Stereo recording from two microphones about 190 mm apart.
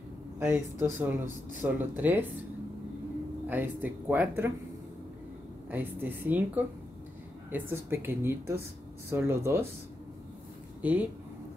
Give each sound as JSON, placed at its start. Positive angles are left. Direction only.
{"t": 0.4, "sound": "speech", "side_deg": -15}
{"t": 3.4, "sound": "speech", "side_deg": -10}
{"t": 5.7, "sound": "speech", "side_deg": -10}
{"t": 10.8, "sound": "speech", "side_deg": -10}